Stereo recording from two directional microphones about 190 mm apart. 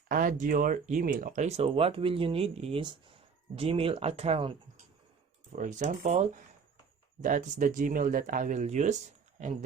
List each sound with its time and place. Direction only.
0.1 s speech: 45° right (ahead or behind); by 4.5 s 30° right (ahead or behind)
5.5 s speech: 40° right (ahead or behind)